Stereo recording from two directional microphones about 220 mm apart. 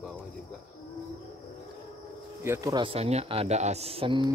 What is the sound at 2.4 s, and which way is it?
Speech, 15° right (ahead or behind).